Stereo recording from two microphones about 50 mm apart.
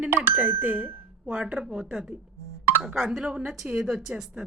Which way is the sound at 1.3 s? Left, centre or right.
Right.